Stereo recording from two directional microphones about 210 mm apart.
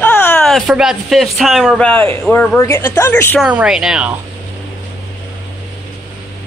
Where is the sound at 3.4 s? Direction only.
5° right (ahead or behind).